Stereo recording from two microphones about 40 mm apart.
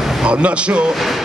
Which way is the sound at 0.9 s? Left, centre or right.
Centre.